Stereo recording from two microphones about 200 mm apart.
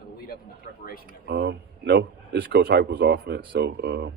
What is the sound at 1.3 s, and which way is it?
A man's voice, 55° right (ahead or behind).